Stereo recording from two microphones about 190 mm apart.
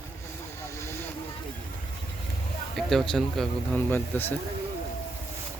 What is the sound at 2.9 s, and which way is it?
Speech, centre (ahead or behind).